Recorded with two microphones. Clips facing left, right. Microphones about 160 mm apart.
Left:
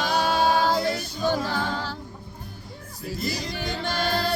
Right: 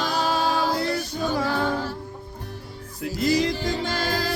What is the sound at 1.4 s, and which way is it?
Music, 70° right (ahead or behind).